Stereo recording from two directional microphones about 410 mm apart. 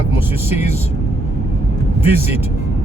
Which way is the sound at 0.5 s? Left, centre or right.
Centre.